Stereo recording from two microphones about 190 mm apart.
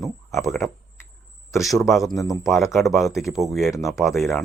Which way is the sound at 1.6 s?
Centre (ahead or behind).